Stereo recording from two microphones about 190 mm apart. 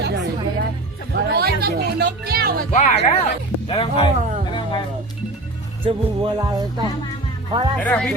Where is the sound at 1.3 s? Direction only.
55° right (ahead or behind).